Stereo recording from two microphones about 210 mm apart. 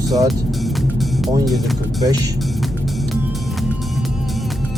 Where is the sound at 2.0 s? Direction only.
15° right (ahead or behind).